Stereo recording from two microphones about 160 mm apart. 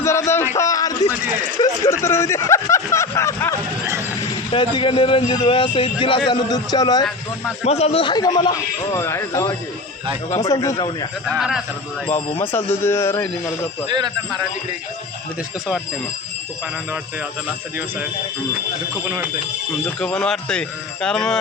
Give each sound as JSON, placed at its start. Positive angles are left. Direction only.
{"t": 0.0, "sound": "a sound", "side_deg": 15}
{"t": 1.5, "sound": "speech", "side_deg": 20}
{"t": 4.5, "sound": "a man's voice", "side_deg": 30}
{"t": 7.6, "sound": "a man's voice", "side_deg": 40}
{"t": 8.1, "sound": "speech", "side_deg": 25}
{"t": 11.3, "sound": "speech", "side_deg": -5}
{"t": 12.0, "sound": "speech", "side_deg": 10}
{"t": 20.0, "sound": "speech", "side_deg": 5}